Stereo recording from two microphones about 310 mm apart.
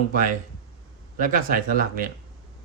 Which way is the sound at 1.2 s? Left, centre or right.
Right.